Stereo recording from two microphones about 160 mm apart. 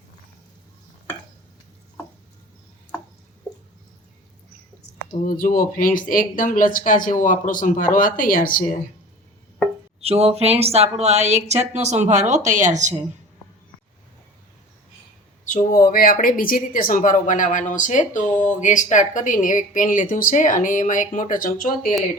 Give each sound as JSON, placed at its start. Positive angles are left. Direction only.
{"t": 5.2, "sound": "speech", "side_deg": 60}
{"t": 10.0, "sound": "speech", "side_deg": -40}
{"t": 15.4, "sound": "speech", "side_deg": 60}